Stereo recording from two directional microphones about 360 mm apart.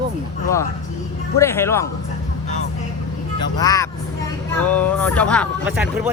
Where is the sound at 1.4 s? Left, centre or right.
Centre.